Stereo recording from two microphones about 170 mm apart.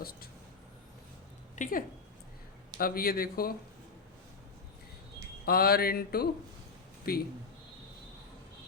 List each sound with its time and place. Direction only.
0.0 s speech: 65° left (ahead or behind)
1.5 s speech: 50° left (ahead or behind)
2.7 s speech: 65° left (ahead or behind)
5.5 s speech: 65° left (ahead or behind)